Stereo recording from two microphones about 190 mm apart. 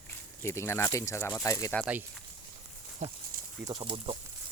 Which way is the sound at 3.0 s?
35° right (ahead or behind).